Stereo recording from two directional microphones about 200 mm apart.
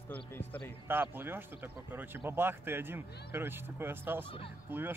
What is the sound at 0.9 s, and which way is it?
Speech, 10° right (ahead or behind).